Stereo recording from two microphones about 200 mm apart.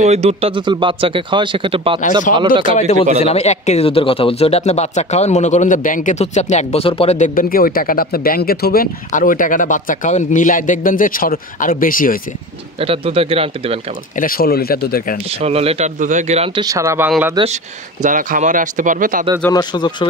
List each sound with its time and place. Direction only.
0.0 s a man's voice: 35° right (ahead or behind)
2.6 s speech: 35° left (ahead or behind)
12.7 s a man's voice: 30° right (ahead or behind)
14.1 s speech: 45° left (ahead or behind)
15.2 s a man's voice: 30° right (ahead or behind)
18.0 s speech: 40° right (ahead or behind)
19.5 s speech: 20° left (ahead or behind)